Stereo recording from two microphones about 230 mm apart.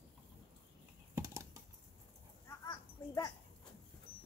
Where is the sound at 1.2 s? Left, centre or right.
Centre.